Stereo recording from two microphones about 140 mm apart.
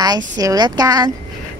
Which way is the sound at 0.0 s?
25° right (ahead or behind).